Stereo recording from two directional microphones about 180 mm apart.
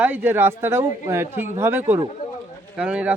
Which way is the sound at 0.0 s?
10° right (ahead or behind).